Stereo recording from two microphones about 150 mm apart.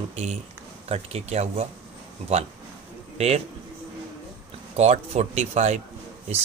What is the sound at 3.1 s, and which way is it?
Speech, 45° right (ahead or behind).